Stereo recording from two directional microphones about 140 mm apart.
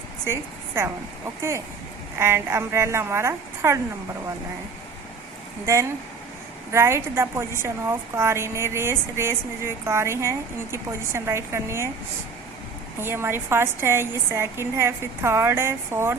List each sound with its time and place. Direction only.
0.3 s a woman's voice: 15° right (ahead or behind)
6.7 s a woman's voice: 20° right (ahead or behind)
13.0 s a woman's voice: 15° right (ahead or behind)